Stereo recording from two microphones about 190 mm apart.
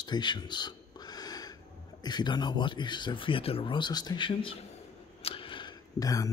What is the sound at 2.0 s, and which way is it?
Speech, 20° left (ahead or behind).